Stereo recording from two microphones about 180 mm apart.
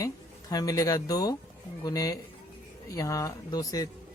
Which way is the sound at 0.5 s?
20° left (ahead or behind).